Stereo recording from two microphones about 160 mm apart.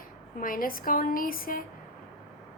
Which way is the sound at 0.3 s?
60° left (ahead or behind).